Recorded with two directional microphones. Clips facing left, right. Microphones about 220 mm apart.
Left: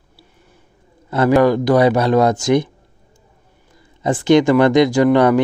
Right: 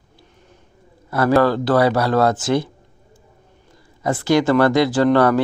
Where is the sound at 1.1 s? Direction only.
20° left (ahead or behind).